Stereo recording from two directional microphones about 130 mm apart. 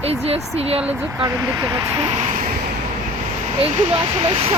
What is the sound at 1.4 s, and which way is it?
Speech, 25° right (ahead or behind).